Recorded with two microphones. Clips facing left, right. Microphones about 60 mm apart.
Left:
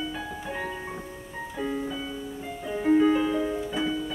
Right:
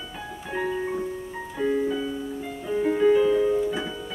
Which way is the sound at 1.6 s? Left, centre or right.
Centre.